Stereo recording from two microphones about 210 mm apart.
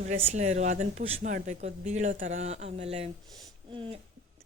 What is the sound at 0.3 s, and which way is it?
Speech, 35° right (ahead or behind).